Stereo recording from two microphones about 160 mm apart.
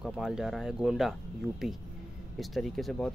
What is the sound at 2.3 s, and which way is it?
Speech, centre (ahead or behind).